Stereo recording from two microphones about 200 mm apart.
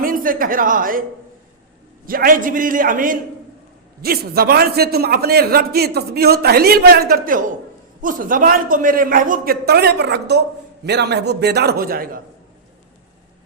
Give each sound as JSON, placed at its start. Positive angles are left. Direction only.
{"t": 0.0, "sound": "speech", "side_deg": -45}
{"t": 2.0, "sound": "a man's voice", "side_deg": -45}